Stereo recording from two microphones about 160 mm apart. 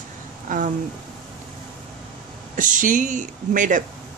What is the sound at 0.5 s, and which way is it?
Speech, 55° right (ahead or behind).